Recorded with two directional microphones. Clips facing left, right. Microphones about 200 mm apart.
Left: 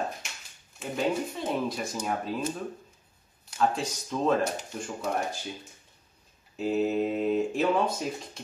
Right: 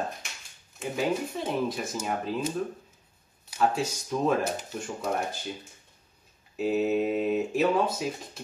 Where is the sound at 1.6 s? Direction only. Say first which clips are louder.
Even; centre (ahead or behind).